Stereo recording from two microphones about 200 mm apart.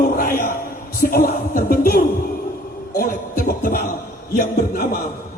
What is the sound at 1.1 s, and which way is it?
Music, 45° left (ahead or behind).